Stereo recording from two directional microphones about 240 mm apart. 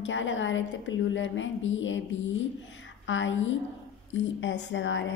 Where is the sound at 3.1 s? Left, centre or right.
Left.